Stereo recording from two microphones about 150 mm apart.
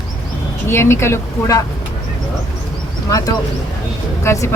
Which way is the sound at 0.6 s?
15° left (ahead or behind).